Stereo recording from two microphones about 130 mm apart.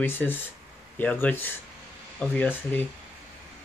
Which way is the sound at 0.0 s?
15° left (ahead or behind).